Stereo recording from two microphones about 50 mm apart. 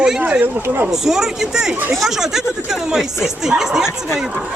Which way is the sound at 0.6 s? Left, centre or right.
Right.